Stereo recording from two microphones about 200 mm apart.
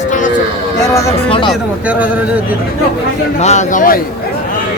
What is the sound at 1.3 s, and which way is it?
Speech, 25° left (ahead or behind).